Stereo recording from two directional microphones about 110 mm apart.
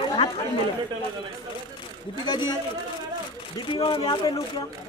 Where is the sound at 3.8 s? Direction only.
45° left (ahead or behind).